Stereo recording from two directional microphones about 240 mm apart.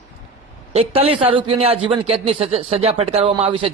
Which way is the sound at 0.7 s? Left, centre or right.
Right.